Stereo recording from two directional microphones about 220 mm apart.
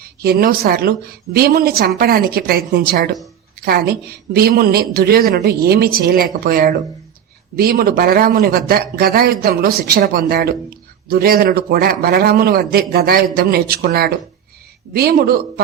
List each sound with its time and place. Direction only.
0.0 s a woman's voice: 45° right (ahead or behind)